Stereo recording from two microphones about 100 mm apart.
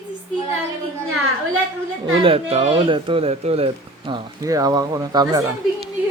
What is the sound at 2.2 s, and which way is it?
Speech, 70° right (ahead or behind).